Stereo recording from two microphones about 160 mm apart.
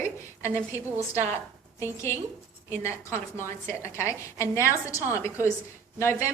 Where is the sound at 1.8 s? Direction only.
15° left (ahead or behind).